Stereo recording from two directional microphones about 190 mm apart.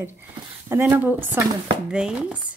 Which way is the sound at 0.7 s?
10° right (ahead or behind).